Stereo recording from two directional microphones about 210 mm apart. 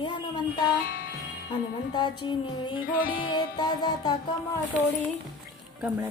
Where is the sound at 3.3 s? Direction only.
20° left (ahead or behind).